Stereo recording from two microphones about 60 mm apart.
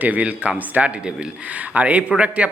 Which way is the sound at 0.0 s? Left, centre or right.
Right.